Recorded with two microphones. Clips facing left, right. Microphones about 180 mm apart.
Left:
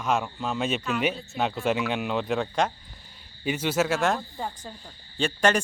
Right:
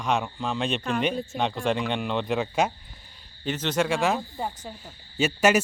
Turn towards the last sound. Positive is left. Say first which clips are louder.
# right 2 dB
turn(degrees=-5)  # may be behind; listen again after turning